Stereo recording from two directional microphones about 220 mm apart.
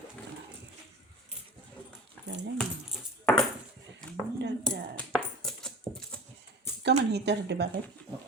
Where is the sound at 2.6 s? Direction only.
Centre (ahead or behind).